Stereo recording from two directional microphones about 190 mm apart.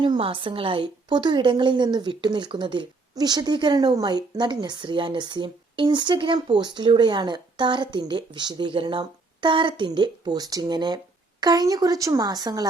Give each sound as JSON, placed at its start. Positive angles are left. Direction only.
{"t": 0.0, "sound": "a woman's voice", "side_deg": -25}